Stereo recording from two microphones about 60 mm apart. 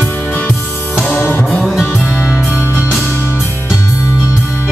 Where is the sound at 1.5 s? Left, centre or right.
Centre.